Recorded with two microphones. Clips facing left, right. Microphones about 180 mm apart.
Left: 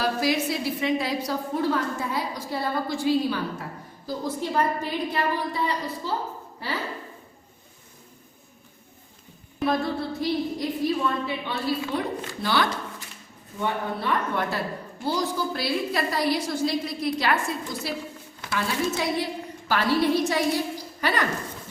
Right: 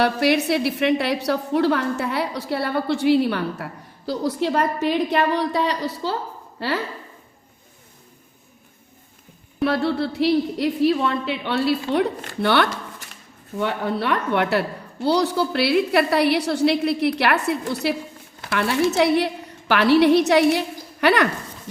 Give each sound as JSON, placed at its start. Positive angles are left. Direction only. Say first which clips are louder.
{"t": 0.0, "sound": "a woman's voice", "louder": "right 5 dB", "side_deg": -70}
{"t": 9.6, "sound": "a woman's voice", "louder": "right 4 dB", "side_deg": -75}
{"t": 13.6, "sound": "a woman's voice", "louder": "right 5 dB", "side_deg": -75}